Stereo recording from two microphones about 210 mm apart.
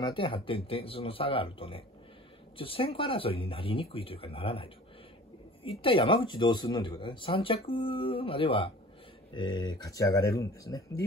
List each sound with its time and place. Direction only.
0.1 s speech: 25° left (ahead or behind)